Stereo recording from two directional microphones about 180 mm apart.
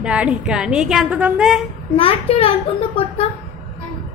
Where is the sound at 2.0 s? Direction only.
30° left (ahead or behind).